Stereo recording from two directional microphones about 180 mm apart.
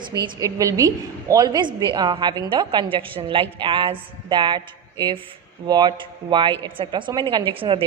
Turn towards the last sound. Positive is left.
turn(degrees=-30)  # may be behind; listen again after turning